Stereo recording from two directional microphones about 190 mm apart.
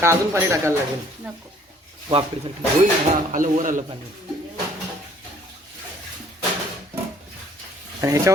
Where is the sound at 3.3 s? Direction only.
45° right (ahead or behind).